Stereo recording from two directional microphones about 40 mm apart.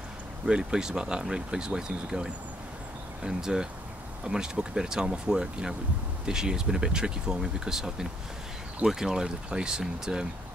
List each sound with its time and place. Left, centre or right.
0.5 s speech: right